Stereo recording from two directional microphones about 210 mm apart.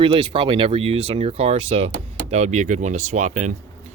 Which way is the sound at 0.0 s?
25° right (ahead or behind).